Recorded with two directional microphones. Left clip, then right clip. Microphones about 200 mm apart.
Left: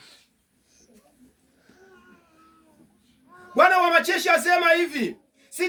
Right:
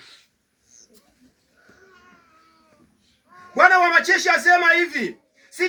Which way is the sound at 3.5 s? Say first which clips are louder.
Right 3 dB; 30° left (ahead or behind).